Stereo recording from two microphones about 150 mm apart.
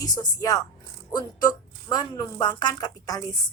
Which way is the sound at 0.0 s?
25° left (ahead or behind).